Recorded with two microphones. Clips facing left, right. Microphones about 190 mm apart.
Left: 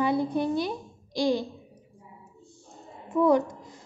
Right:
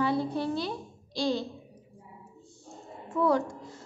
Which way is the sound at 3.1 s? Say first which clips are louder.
Left 4 dB; 15° left (ahead or behind).